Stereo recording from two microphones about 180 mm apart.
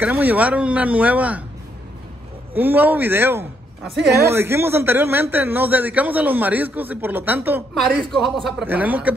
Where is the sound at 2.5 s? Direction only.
10° right (ahead or behind).